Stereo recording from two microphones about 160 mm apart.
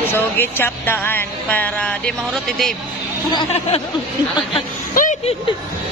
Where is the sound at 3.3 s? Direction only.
40° left (ahead or behind).